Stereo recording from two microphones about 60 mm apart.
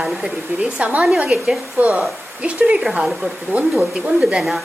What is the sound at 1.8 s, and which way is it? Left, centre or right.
A woman's voice, right.